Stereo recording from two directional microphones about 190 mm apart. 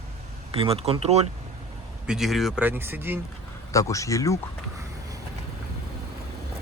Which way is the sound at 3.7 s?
15° left (ahead or behind).